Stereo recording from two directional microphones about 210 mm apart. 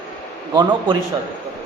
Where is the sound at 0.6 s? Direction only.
25° right (ahead or behind).